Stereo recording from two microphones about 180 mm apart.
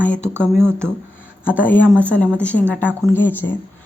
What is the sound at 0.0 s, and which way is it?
Speech, 5° left (ahead or behind).